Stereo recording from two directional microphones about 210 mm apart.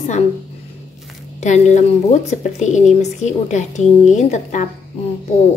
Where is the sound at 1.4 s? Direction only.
35° left (ahead or behind).